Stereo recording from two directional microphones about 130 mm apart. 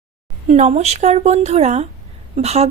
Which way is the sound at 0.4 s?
60° right (ahead or behind).